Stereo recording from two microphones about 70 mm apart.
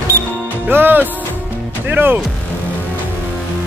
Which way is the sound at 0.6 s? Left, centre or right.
Right.